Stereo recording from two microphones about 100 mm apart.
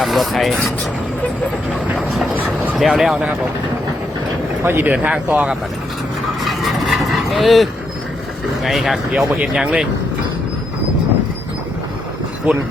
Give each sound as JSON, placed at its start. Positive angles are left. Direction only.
{"t": 0.0, "sound": "speech", "side_deg": 0}
{"t": 2.7, "sound": "speech", "side_deg": -5}
{"t": 4.6, "sound": "speech", "side_deg": -20}
{"t": 6.4, "sound": "a sound", "side_deg": 0}
{"t": 8.6, "sound": "speech", "side_deg": 0}